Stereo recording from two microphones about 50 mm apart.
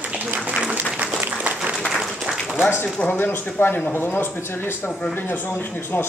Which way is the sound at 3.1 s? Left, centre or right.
Left.